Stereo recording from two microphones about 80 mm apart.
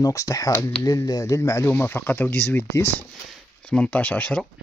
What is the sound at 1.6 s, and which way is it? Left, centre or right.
Speech, left.